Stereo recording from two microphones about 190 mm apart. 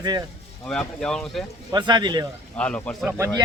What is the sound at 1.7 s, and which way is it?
Speech, 25° right (ahead or behind).